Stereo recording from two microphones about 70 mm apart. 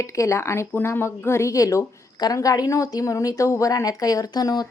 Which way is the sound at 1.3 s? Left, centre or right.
Left.